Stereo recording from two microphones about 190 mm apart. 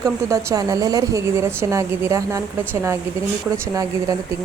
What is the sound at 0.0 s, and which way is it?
Speech, 15° right (ahead or behind).